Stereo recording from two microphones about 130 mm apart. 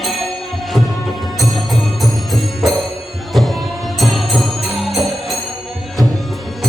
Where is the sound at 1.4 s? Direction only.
Centre (ahead or behind).